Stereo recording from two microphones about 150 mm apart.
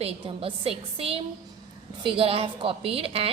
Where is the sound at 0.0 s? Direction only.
35° right (ahead or behind).